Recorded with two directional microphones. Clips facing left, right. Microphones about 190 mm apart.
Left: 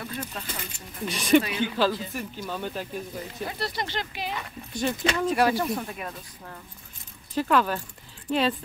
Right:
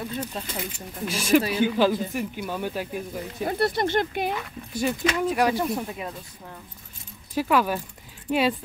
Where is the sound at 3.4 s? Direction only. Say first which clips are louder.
Right 9 dB; 50° right (ahead or behind).